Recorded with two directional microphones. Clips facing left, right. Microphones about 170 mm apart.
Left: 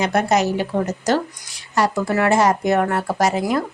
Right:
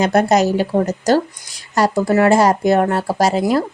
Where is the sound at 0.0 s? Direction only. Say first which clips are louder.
Right 4 dB; 35° right (ahead or behind).